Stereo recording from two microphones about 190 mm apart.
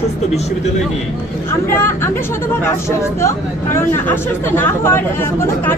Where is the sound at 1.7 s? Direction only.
15° left (ahead or behind).